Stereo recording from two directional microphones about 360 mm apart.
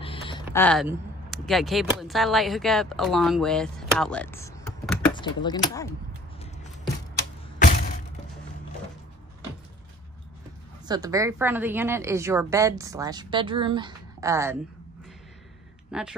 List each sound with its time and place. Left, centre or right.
0.0 s speech: centre
7.5 s a sound: left
10.9 s a woman's voice: centre
15.9 s speech: centre